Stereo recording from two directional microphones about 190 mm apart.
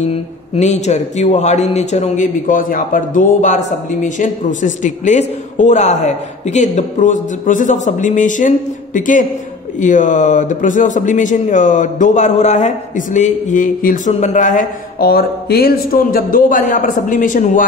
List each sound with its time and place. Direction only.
0.1 s speech: 35° left (ahead or behind)